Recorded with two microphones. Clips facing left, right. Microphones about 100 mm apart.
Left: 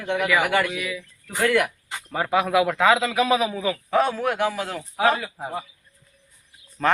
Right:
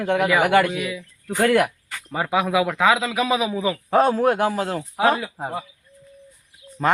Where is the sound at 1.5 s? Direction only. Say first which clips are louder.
Right 3 dB; 40° right (ahead or behind).